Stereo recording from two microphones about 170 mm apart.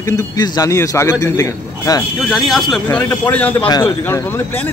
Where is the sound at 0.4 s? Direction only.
20° left (ahead or behind).